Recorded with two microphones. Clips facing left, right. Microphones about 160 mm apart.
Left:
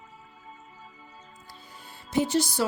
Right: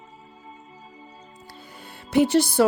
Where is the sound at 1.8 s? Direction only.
70° right (ahead or behind).